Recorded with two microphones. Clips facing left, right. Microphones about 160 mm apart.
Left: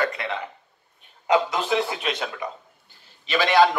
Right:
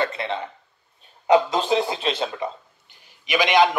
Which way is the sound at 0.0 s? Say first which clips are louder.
Right 1 dB; 30° right (ahead or behind).